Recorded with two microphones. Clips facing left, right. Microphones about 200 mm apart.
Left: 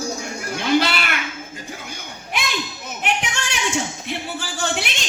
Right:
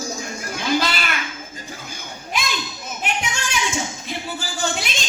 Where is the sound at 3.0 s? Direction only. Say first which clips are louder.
Left 2 dB; 70° left (ahead or behind).